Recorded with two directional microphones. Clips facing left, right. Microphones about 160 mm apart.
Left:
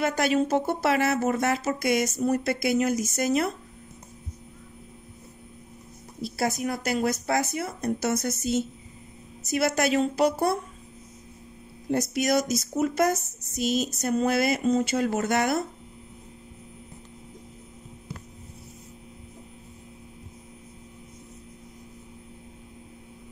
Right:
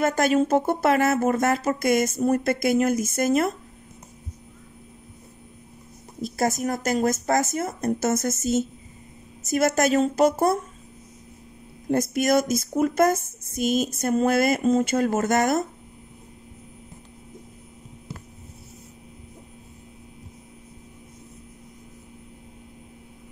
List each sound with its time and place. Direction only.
0.0 s speech: 45° right (ahead or behind)
6.2 s speech: 45° right (ahead or behind)
11.9 s speech: 50° right (ahead or behind)